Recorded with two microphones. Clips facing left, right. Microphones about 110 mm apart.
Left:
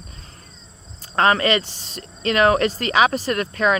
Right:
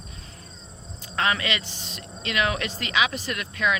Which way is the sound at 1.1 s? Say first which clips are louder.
Left 8 dB; 40° left (ahead or behind).